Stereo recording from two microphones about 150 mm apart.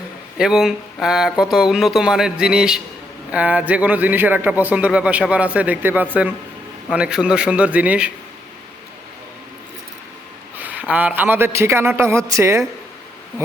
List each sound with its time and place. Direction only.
0.3 s a man's voice: 5° right (ahead or behind)
10.6 s a man's voice: 10° right (ahead or behind)